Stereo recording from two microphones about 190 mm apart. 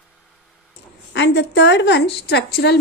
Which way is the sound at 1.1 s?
65° left (ahead or behind).